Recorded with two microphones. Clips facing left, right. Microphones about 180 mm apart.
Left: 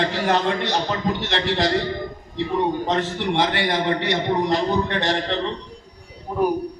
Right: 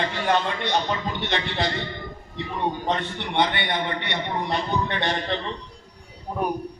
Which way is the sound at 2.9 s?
90° left.